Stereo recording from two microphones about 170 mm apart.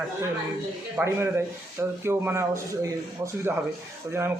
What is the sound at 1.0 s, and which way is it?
Speech, 15° right (ahead or behind).